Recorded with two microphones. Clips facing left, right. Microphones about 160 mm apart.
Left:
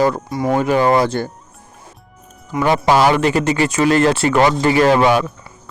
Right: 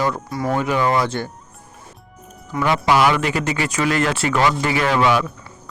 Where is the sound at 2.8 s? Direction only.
30° left (ahead or behind).